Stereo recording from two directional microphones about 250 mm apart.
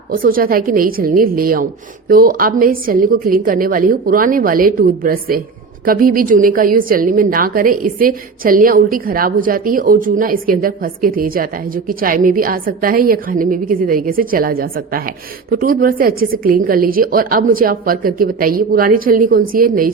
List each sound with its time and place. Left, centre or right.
0.1 s a woman's voice: right